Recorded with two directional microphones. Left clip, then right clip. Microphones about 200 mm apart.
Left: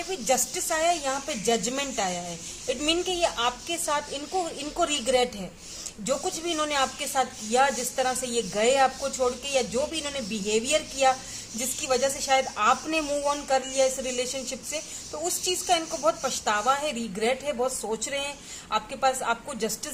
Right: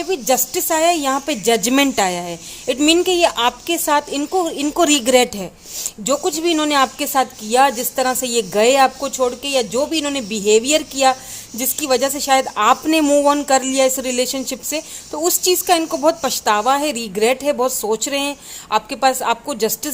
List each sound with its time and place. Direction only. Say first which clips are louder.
0.1 s speech: right 8 dB; 45° right (ahead or behind)